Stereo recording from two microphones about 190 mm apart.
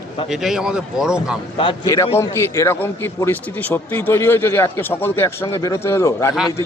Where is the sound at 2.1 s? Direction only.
15° left (ahead or behind).